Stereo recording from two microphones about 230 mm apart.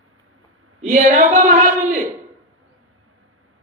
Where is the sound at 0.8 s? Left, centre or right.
Right.